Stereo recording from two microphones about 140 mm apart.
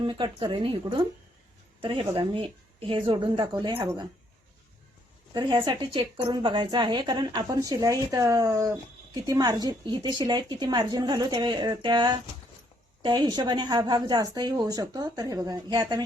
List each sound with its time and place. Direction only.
0.0 s a woman's voice: 35° right (ahead or behind)
5.3 s a woman's voice: 30° right (ahead or behind)